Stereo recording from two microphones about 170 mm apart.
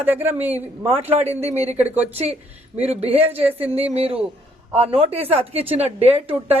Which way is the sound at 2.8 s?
35° right (ahead or behind).